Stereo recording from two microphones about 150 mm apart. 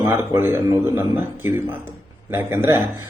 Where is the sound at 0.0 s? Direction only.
15° right (ahead or behind).